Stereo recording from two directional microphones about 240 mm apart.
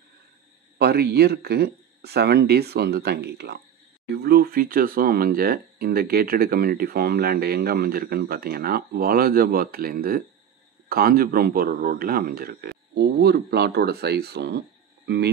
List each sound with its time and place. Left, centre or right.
0.7 s speech: right